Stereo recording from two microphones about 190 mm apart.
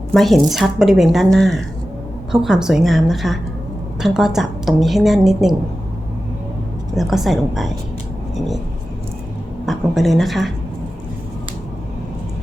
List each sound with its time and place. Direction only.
0.1 s a woman's voice: centre (ahead or behind)
6.9 s a woman's voice: centre (ahead or behind)
9.6 s a woman's voice: centre (ahead or behind)